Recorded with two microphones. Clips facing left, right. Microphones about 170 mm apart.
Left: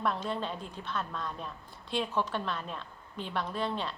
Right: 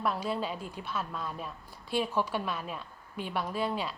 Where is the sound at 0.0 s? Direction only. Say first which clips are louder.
Right 1 dB; 5° right (ahead or behind).